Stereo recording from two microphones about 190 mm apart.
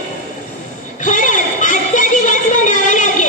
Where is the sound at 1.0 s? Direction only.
40° left (ahead or behind).